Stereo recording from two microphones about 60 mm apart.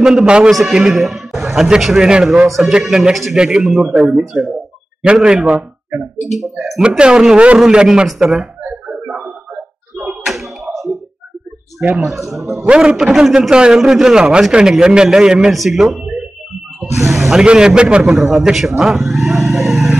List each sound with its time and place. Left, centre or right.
0.0 s a man's voice: centre
0.5 s a man's voice: centre
2.4 s a man's voice: centre
7.6 s a sound: centre
10.2 s a sound: centre
12.0 s a man's voice: centre
12.6 s a man's voice: centre
17.3 s a man's voice: centre